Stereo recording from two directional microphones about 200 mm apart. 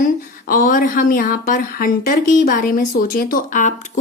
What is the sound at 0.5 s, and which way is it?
Speech, 45° left (ahead or behind).